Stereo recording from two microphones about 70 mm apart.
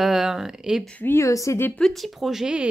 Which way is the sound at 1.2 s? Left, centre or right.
Left.